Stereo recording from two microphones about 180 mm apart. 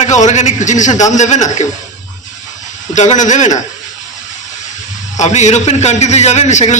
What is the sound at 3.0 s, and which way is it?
Speech, 40° left (ahead or behind).